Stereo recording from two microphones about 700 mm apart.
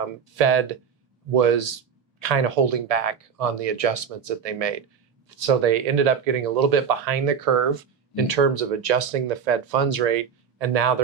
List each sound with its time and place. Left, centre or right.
0.3 s speech: right
8.1 s speech: right